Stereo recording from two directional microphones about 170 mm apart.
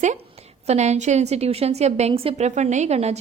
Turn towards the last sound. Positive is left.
turn(degrees=-40)  # may be behind; listen again after turning